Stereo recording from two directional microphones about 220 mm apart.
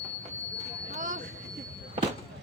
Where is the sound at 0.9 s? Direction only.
35° right (ahead or behind).